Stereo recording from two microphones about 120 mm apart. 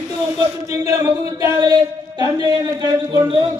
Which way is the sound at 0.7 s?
25° right (ahead or behind).